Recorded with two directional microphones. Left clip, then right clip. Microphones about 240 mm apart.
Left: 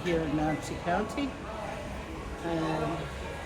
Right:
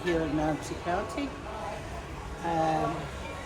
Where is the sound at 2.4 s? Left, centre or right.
Centre.